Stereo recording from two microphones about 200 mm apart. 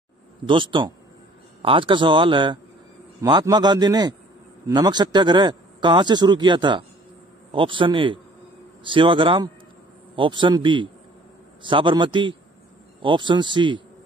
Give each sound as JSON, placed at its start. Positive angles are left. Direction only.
{"t": 0.5, "sound": "speech", "side_deg": -25}